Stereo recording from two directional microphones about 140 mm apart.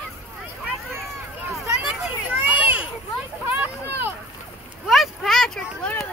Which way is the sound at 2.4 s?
10° right (ahead or behind).